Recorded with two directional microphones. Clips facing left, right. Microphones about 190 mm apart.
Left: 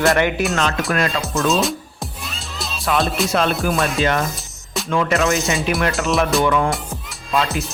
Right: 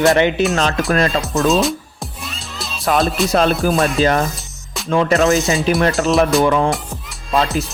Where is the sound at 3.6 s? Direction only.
35° right (ahead or behind).